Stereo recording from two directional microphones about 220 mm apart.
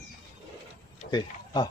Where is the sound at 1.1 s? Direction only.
20° left (ahead or behind).